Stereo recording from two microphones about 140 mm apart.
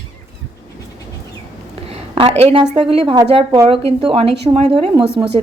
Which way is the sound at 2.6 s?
30° right (ahead or behind).